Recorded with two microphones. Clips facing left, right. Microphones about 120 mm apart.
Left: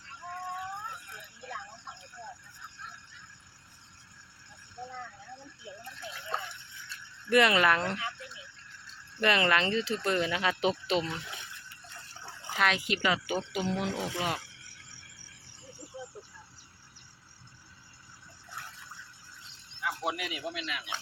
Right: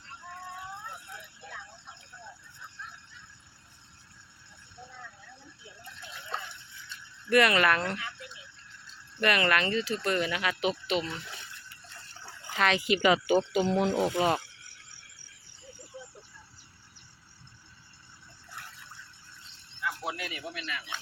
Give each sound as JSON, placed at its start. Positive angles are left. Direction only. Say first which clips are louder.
{"t": 5.8, "sound": "a sound", "louder": "left 1 dB", "side_deg": 0}
{"t": 7.3, "sound": "speech", "louder": "even", "side_deg": 20}
{"t": 9.2, "sound": "speech", "louder": "even", "side_deg": 25}
{"t": 11.0, "sound": "speech", "louder": "left 1 dB", "side_deg": 10}
{"t": 12.5, "sound": "speech", "louder": "right 2 dB", "side_deg": 5}
{"t": 12.9, "sound": "speech", "louder": "right 6 dB", "side_deg": -15}
{"t": 19.8, "sound": "speech", "louder": "left 1 dB", "side_deg": 20}